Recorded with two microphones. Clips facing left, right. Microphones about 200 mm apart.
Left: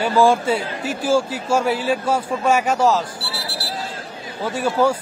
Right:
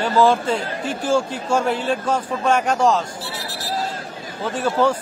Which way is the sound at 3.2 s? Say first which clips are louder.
Even; 35° left (ahead or behind).